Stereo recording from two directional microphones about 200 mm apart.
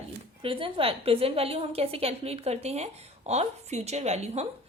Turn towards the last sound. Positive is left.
turn(degrees=-30)  # may be behind; listen again after turning